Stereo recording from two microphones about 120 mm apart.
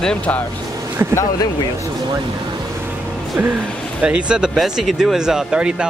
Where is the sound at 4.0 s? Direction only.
10° right (ahead or behind).